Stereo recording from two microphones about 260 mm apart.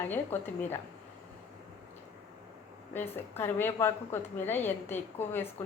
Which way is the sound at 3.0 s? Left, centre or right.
Centre.